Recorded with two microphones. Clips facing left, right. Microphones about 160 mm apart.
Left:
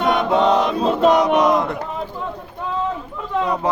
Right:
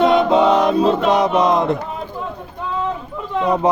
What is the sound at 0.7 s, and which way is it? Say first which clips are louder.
Music: right 1 dB; 25° right (ahead or behind).